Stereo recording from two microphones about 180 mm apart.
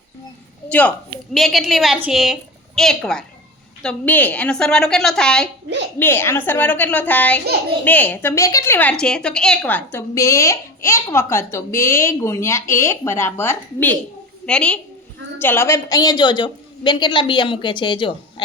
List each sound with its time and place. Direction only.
0.7 s a woman's voice: 5° left (ahead or behind); by 18.1 s 25° left (ahead or behind)